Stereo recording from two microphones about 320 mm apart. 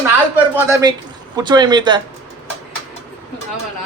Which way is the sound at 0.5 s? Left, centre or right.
Centre.